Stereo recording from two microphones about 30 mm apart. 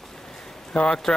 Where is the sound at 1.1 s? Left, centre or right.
Left.